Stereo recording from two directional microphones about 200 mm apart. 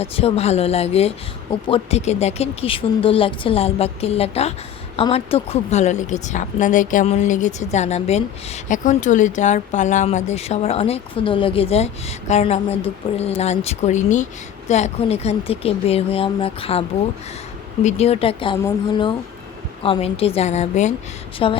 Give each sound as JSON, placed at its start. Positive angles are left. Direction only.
{"t": 0.0, "sound": "a woman's voice", "side_deg": 30}
{"t": 17.8, "sound": "a woman's voice", "side_deg": 30}